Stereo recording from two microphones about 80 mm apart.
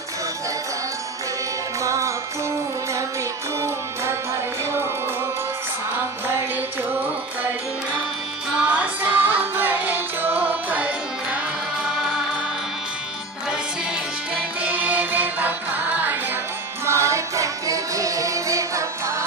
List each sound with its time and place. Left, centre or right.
1.8 s music: right
3.6 s music: right
8.6 s music: centre
11.8 s music: centre
14.3 s music: centre
16.8 s music: right